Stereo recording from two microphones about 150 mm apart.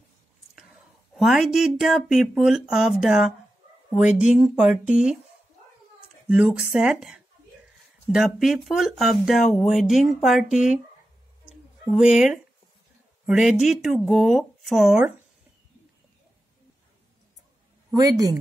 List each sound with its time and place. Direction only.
1.1 s speech: centre (ahead or behind)
6.2 s speech: 5° right (ahead or behind)
11.4 s a sound: 5° right (ahead or behind)
13.2 s speech: 5° right (ahead or behind)
17.9 s speech: 25° right (ahead or behind)